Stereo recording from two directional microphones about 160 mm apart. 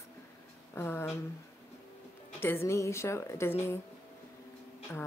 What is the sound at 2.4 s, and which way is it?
Speech, 15° left (ahead or behind).